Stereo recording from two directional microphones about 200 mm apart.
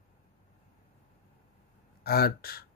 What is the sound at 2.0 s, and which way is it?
Speech, 50° left (ahead or behind).